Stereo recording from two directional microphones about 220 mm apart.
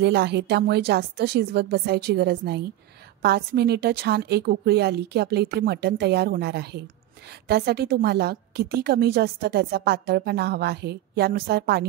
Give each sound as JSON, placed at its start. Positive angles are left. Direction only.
{"t": 0.0, "sound": "a woman's voice", "side_deg": -50}